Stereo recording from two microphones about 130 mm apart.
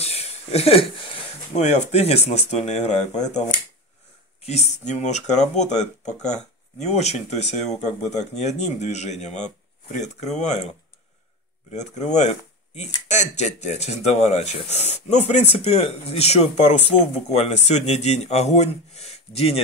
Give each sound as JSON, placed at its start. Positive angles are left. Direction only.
{"t": 0.0, "sound": "a sound", "side_deg": 55}
{"t": 1.5, "sound": "speech", "side_deg": 60}
{"t": 11.7, "sound": "speech", "side_deg": 65}